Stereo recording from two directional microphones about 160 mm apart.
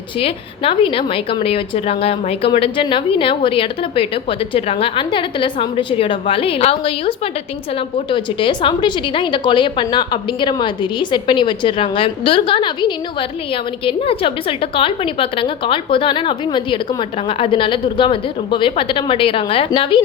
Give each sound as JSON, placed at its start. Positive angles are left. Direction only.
{"t": 0.2, "sound": "a woman's voice", "side_deg": 35}